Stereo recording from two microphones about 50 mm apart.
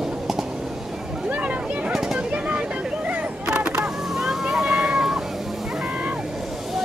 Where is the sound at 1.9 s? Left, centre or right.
Centre.